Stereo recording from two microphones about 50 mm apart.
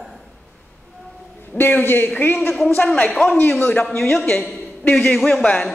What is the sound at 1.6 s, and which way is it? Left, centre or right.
Speech, left.